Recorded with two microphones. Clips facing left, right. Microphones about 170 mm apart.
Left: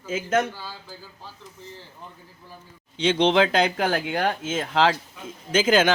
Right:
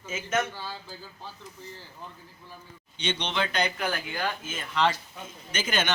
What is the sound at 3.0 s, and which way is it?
Speech, 90° left.